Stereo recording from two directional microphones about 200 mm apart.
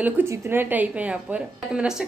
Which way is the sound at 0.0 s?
10° right (ahead or behind).